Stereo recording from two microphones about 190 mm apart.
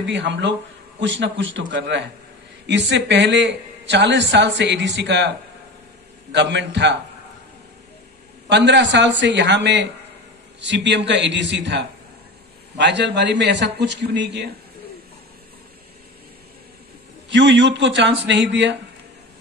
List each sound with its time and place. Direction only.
0.0 s a man's voice: 70° right (ahead or behind)
6.3 s a man's voice: 65° right (ahead or behind)
8.5 s a man's voice: 65° right (ahead or behind)
17.3 s a man's voice: 70° right (ahead or behind)